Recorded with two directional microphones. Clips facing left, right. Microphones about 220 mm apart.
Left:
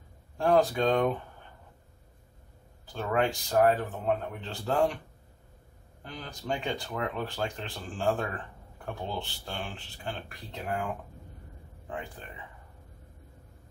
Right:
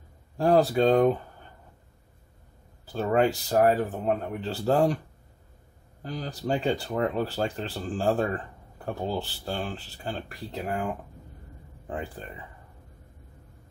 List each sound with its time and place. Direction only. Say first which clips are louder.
0.4 s speech: right 3 dB; 35° right (ahead or behind)
2.9 s speech: right 5 dB; 35° right (ahead or behind)
6.0 s speech: right 5 dB; 35° right (ahead or behind)
11.9 s speech: right 4 dB; 35° right (ahead or behind)